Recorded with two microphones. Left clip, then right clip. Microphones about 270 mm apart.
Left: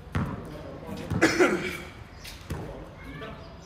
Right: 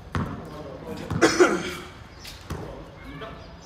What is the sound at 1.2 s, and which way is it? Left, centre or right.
Cough, centre.